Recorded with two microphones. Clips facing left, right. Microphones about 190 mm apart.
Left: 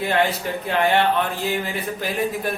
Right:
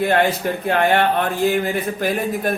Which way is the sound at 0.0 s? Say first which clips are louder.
Right 4 dB; 50° right (ahead or behind).